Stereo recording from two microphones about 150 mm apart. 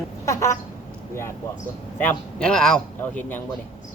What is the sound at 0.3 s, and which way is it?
Chicken, 20° left (ahead or behind).